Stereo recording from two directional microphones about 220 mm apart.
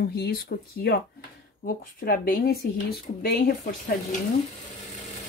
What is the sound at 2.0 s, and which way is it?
Speech, 40° left (ahead or behind).